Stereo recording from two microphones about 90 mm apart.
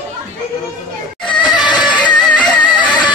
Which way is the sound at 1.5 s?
55° left (ahead or behind).